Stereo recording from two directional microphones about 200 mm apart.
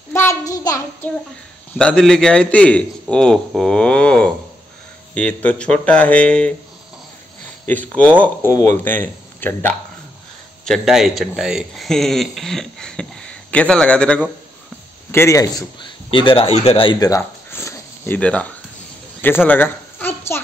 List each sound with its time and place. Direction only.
0.1 s child singing: 15° left (ahead or behind)
1.8 s a man's voice: 5° left (ahead or behind)
7.6 s speech: 10° left (ahead or behind)
10.6 s a man's voice: centre (ahead or behind)
19.2 s a sound: 10° left (ahead or behind)